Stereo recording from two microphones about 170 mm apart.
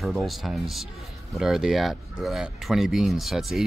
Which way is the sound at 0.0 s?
Centre (ahead or behind).